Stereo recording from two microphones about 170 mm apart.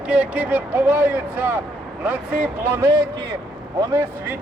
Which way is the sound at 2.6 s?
15° right (ahead or behind).